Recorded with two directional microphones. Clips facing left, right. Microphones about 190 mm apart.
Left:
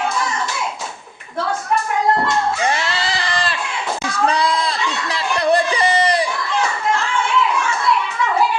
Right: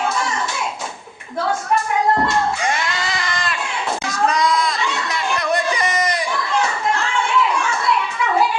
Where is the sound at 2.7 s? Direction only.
30° left (ahead or behind).